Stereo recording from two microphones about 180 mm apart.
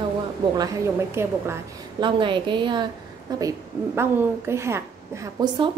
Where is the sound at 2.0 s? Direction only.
25° right (ahead or behind).